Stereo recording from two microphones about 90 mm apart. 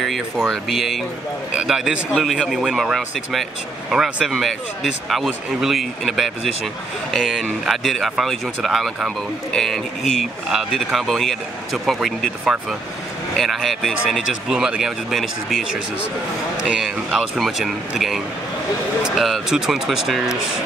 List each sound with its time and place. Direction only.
0.5 s speech: 5° right (ahead or behind)
16.6 s speech: 10° right (ahead or behind)